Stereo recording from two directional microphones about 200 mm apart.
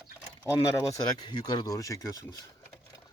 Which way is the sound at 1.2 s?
20° left (ahead or behind).